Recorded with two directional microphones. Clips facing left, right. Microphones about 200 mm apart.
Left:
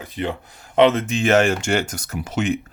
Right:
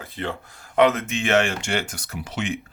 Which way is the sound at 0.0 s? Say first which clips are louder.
Left 4 dB; 15° left (ahead or behind).